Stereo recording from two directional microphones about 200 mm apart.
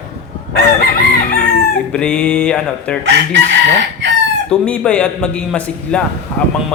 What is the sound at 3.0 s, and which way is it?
Chicken, 60° right (ahead or behind).